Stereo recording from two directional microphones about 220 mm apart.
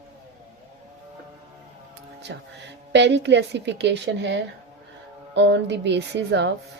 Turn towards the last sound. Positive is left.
turn(degrees=-50)  # may be behind; listen again after turning